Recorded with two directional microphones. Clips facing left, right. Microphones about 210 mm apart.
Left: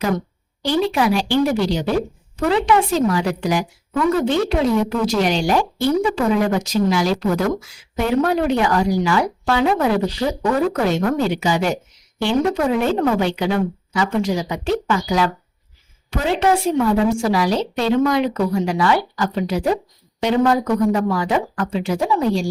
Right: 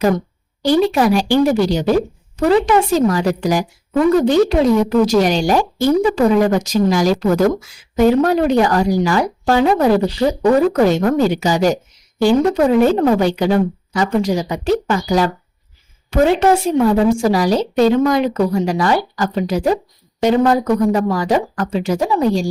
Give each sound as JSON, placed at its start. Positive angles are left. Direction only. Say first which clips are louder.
{"t": 0.6, "sound": "a woman's voice", "louder": "right 5 dB", "side_deg": -45}